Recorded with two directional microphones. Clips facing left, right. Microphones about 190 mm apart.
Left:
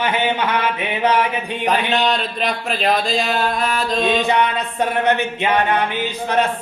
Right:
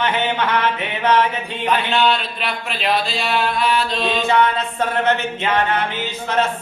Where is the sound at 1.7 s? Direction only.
40° left (ahead or behind).